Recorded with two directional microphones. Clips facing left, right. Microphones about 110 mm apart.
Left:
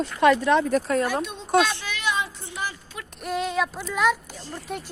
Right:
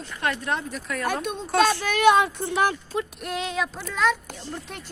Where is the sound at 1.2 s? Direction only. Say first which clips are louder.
Even; 50° right (ahead or behind).